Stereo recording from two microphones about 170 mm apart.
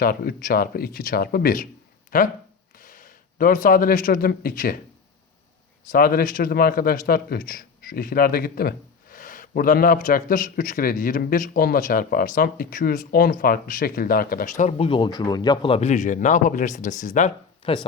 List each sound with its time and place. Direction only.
0.0 s a man's voice: 60° left (ahead or behind)
5.9 s a man's voice: 60° left (ahead or behind)
14.8 s a man's voice: 30° left (ahead or behind); by 17.3 s 45° left (ahead or behind)